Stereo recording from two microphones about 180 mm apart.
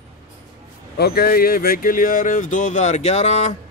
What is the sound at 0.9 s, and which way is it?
Speech, 60° left (ahead or behind).